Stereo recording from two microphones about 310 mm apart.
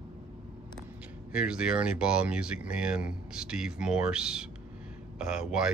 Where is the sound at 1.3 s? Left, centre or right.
Centre.